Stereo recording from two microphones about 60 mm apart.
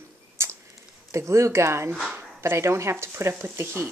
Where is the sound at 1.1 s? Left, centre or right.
Right.